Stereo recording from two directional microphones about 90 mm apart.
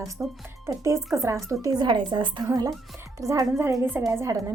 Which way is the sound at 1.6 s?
50° right (ahead or behind).